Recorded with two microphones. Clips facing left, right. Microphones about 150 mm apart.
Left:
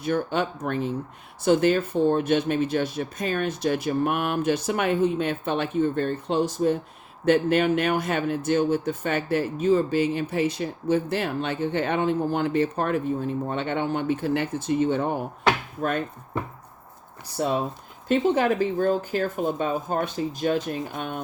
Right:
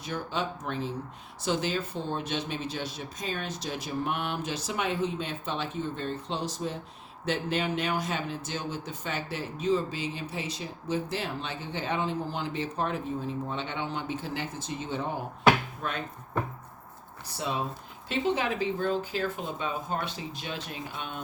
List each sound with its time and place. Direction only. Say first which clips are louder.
0.0 s speech: left 8 dB; 60° left (ahead or behind)
17.3 s speech: left 7 dB; 45° left (ahead or behind)